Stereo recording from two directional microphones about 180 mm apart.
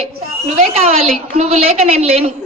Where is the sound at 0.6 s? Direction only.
35° right (ahead or behind).